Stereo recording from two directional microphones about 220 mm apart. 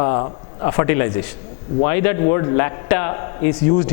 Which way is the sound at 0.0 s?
20° left (ahead or behind).